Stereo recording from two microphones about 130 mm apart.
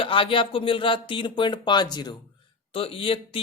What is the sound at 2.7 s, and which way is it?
Speech, 45° left (ahead or behind).